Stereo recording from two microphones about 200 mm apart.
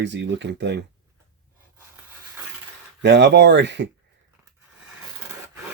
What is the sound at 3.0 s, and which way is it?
Speech, 60° right (ahead or behind).